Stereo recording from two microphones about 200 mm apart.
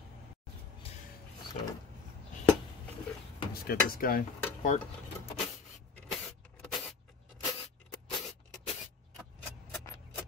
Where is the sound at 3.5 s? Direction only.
50° left (ahead or behind).